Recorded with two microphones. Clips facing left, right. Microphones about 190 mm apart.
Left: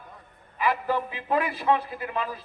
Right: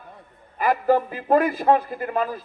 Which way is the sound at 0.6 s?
45° right (ahead or behind).